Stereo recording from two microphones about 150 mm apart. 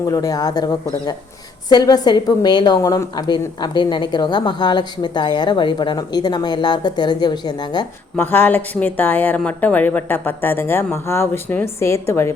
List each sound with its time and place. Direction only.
0.0 s a woman's voice: 25° left (ahead or behind)
8.1 s speech: 15° left (ahead or behind)